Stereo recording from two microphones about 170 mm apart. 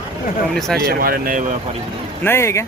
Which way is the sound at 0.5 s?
Centre (ahead or behind).